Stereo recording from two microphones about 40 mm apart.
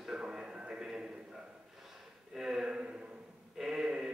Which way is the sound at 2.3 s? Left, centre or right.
Centre.